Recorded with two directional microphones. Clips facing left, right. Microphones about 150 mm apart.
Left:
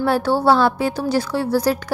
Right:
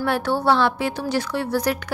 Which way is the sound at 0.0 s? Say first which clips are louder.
Left 4 dB; 35° left (ahead or behind).